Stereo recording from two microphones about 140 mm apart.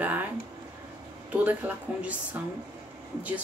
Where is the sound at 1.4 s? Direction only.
10° right (ahead or behind).